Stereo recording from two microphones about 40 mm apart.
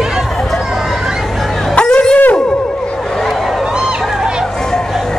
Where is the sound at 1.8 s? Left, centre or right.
Left.